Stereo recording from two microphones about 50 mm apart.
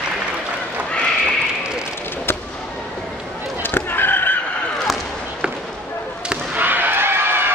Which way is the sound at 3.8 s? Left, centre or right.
Left.